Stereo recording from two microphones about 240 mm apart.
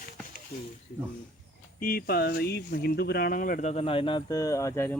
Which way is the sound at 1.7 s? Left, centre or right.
Left.